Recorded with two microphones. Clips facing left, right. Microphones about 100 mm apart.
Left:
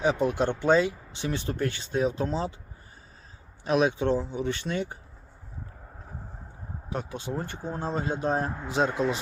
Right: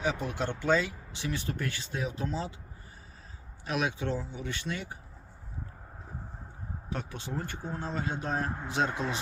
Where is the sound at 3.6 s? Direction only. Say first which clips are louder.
Left 8 dB; 30° left (ahead or behind).